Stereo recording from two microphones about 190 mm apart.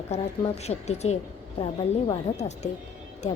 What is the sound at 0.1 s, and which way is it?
A woman's voice, 35° left (ahead or behind).